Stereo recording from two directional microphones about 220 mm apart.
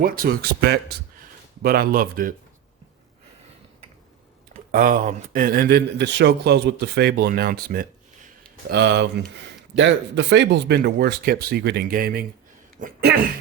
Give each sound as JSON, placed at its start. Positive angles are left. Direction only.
{"t": 0.0, "sound": "a man's voice", "side_deg": -40}
{"t": 4.7, "sound": "a man's voice", "side_deg": -40}